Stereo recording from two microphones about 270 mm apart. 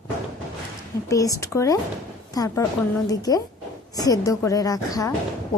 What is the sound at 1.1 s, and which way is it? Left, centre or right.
A woman's voice, centre.